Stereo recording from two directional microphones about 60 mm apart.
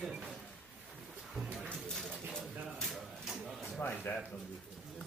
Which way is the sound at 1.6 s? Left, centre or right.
Centre.